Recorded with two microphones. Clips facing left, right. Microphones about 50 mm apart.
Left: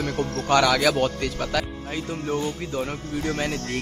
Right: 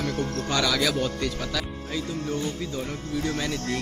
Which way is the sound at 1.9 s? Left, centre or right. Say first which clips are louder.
Left 2 dB; left.